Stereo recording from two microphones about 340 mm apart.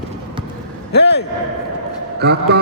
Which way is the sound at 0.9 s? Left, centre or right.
Left.